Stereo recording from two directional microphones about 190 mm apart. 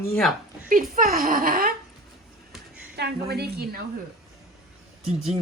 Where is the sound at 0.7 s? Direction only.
50° right (ahead or behind).